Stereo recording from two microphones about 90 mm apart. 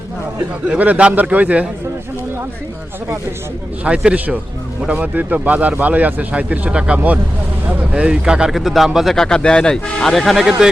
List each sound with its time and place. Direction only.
0.7 s speech: 15° right (ahead or behind)
3.8 s speech: 15° right (ahead or behind)
9.1 s speech: 5° left (ahead or behind)